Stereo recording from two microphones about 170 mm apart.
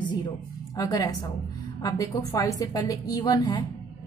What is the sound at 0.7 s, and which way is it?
A woman's voice, 20° left (ahead or behind).